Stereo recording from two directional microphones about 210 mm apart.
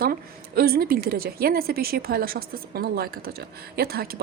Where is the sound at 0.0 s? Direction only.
45° right (ahead or behind).